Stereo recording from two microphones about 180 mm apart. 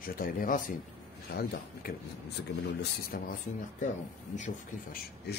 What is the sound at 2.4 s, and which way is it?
Speech, 75° left (ahead or behind).